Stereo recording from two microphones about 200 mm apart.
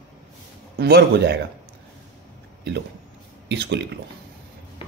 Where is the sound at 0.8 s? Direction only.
60° right (ahead or behind).